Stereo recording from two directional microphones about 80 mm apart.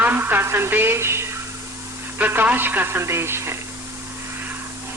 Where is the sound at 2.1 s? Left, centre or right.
Right.